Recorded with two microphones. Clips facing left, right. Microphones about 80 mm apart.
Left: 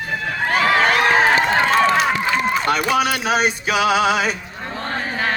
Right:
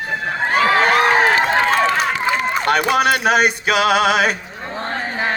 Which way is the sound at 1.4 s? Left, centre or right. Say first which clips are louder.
Even; centre.